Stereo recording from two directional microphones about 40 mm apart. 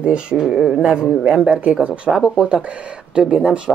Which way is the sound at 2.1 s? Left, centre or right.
Centre.